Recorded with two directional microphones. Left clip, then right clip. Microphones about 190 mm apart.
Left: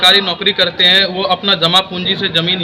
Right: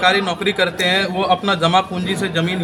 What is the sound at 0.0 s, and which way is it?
Speech, 15° right (ahead or behind).